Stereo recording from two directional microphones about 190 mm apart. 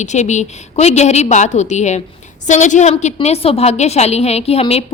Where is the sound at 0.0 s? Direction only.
40° left (ahead or behind).